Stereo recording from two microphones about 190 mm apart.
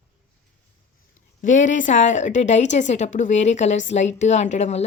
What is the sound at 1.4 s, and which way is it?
A woman's voice, 40° left (ahead or behind).